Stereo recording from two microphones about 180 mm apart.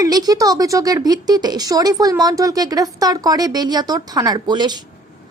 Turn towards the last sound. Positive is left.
turn(degrees=-25)  # may be behind; listen again after turning